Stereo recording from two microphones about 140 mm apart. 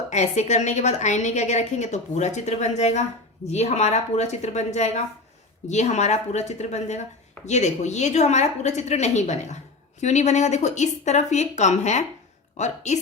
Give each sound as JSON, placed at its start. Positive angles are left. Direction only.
{"t": 0.1, "sound": "a woman's voice", "side_deg": 55}